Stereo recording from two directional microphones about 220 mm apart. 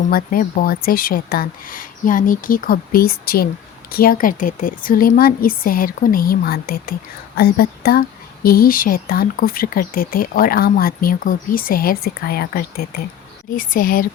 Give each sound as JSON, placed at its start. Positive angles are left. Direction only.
{"t": 0.1, "sound": "speech", "side_deg": 40}